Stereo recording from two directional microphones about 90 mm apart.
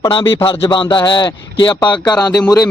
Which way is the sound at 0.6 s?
65° left (ahead or behind).